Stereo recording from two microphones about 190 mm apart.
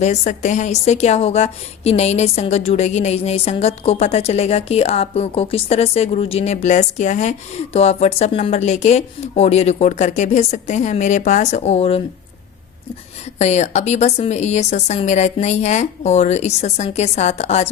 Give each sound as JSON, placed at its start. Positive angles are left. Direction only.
{"t": 0.0, "sound": "a woman's voice", "side_deg": 40}
{"t": 13.4, "sound": "a woman's voice", "side_deg": 35}